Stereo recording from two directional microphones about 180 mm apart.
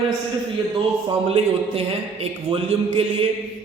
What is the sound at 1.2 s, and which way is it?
A man's voice, 35° right (ahead or behind).